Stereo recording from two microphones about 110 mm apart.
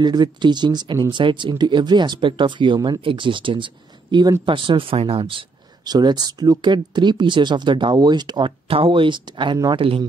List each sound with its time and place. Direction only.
0.0 s speech: 40° right (ahead or behind)
5.9 s speech: 40° right (ahead or behind)